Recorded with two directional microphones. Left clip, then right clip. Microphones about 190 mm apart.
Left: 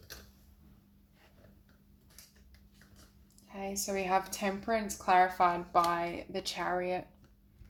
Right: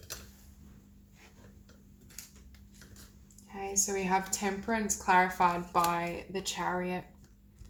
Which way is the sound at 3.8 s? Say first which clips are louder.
Even; 50° left (ahead or behind).